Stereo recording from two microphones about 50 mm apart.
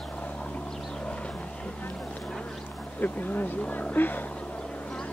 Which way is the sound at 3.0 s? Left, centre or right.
Left.